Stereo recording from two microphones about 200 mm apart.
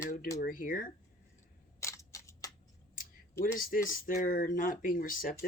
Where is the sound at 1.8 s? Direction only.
15° left (ahead or behind).